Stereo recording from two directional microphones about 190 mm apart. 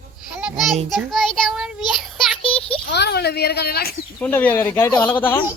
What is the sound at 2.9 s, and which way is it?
Speech, 60° left (ahead or behind).